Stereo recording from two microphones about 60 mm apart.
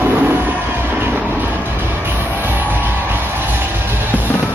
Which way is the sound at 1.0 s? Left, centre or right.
Right.